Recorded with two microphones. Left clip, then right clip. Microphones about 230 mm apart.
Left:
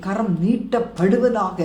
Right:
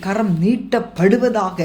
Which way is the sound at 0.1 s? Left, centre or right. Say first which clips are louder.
Right 3 dB; right.